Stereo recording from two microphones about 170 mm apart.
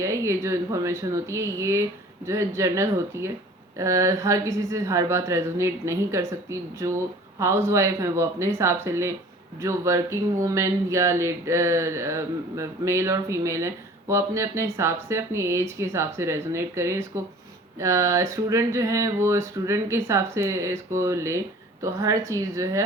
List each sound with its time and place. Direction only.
0.0 s speech: 15° right (ahead or behind)